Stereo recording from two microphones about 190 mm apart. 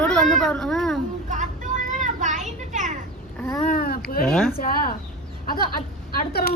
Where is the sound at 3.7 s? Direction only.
50° left (ahead or behind).